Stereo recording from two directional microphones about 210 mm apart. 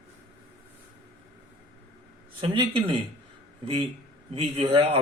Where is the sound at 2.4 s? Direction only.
25° right (ahead or behind).